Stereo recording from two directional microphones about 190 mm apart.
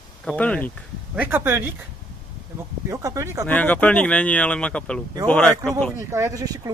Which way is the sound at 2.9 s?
15° right (ahead or behind).